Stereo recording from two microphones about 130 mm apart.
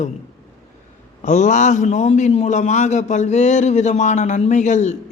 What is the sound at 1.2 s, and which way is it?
A man's voice, 70° left (ahead or behind).